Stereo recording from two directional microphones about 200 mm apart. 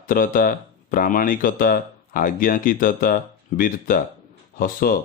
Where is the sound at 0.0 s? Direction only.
45° left (ahead or behind).